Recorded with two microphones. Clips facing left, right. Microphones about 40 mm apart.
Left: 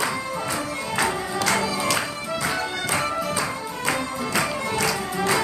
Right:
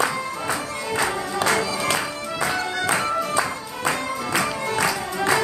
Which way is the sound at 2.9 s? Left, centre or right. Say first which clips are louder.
Right 3 dB; centre.